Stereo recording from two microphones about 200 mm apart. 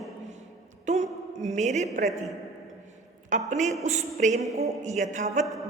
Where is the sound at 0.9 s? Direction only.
35° right (ahead or behind).